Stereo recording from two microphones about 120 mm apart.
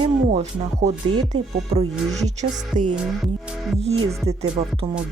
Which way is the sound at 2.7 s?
10° right (ahead or behind).